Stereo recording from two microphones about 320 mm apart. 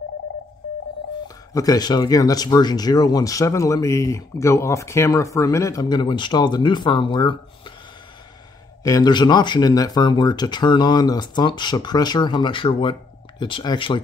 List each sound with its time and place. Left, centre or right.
1.5 s speech: centre
8.8 s speech: centre